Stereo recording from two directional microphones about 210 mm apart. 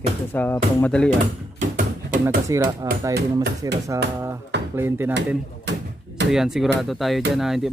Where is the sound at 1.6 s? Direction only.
40° right (ahead or behind).